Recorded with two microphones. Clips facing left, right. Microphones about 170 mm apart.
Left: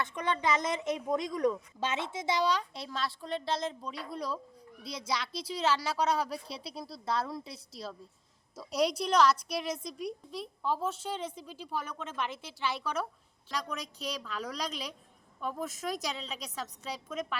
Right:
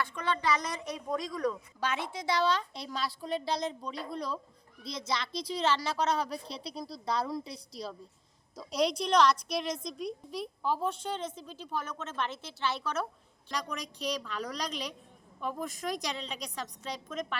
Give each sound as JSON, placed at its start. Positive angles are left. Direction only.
{"t": 0.0, "sound": "a woman's voice", "side_deg": 20}